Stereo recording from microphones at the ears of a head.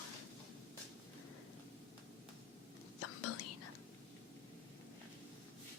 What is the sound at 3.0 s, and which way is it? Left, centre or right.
Whispering, left.